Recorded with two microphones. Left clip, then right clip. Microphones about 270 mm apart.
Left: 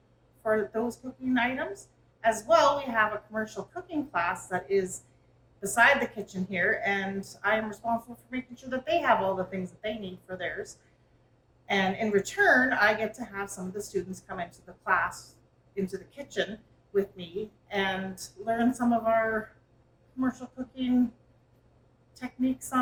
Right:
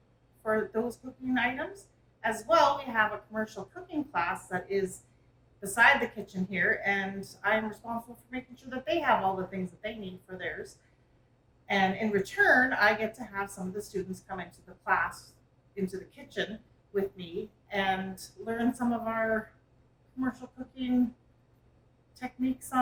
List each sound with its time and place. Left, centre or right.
0.4 s a woman's voice: centre
17.7 s a woman's voice: centre
22.1 s a woman's voice: centre